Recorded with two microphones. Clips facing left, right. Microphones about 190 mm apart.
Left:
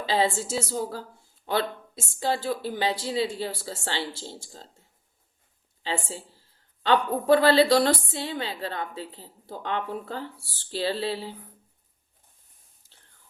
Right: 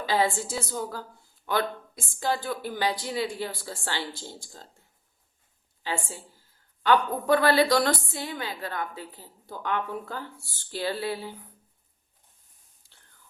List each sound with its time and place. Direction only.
0.0 s a woman's voice: 25° left (ahead or behind)